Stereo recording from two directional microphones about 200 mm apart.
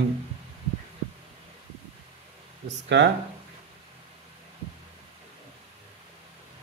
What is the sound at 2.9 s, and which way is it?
Speech, 60° right (ahead or behind).